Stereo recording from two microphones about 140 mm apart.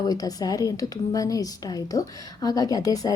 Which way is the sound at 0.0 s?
25° left (ahead or behind).